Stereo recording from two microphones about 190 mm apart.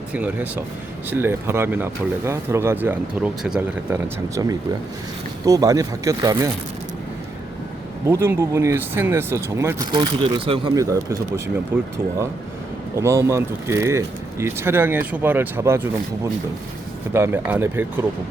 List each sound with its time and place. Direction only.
0.1 s speech: 10° right (ahead or behind)
3.8 s speech: 15° right (ahead or behind)
8.0 s speech: 15° right (ahead or behind)
13.0 s speech: 15° right (ahead or behind)